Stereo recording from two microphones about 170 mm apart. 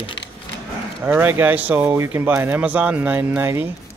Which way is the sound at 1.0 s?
10° right (ahead or behind).